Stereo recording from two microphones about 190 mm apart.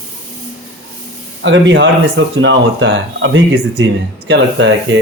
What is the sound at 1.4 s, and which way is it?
Speech, 70° right (ahead or behind).